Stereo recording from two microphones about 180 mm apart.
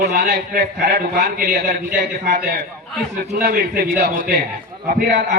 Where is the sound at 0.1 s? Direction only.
55° right (ahead or behind).